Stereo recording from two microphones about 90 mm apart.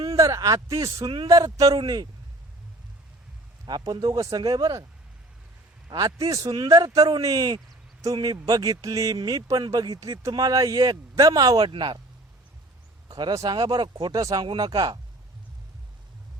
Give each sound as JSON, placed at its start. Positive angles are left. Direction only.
{"t": 0.2, "sound": "a man's voice", "side_deg": -40}
{"t": 3.7, "sound": "speech", "side_deg": -50}
{"t": 6.1, "sound": "a man's voice", "side_deg": -40}
{"t": 11.6, "sound": "speech", "side_deg": -65}
{"t": 13.1, "sound": "speech", "side_deg": -50}
{"t": 13.6, "sound": "speech", "side_deg": -60}
{"t": 14.0, "sound": "speech", "side_deg": -45}